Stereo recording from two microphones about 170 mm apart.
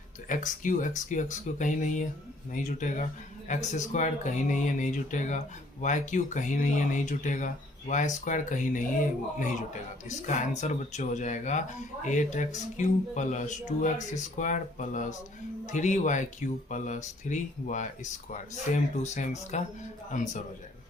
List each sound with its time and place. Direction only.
0.3 s speech: 50° left (ahead or behind)